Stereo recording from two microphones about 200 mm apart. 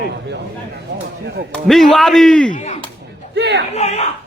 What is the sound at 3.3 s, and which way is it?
Speech, 60° right (ahead or behind).